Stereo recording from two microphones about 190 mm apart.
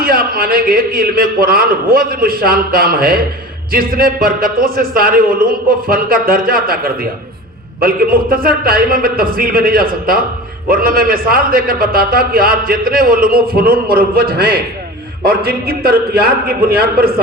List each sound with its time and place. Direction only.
0.0 s a man's voice: 50° right (ahead or behind)